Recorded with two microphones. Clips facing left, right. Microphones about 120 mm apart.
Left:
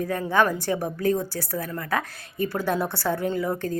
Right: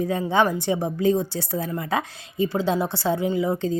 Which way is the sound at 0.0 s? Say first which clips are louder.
Right 2 dB; 20° right (ahead or behind).